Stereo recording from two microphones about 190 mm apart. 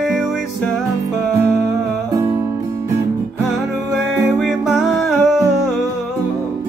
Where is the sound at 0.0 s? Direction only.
Centre (ahead or behind).